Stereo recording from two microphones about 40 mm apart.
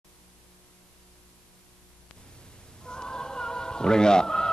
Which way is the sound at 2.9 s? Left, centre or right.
Centre.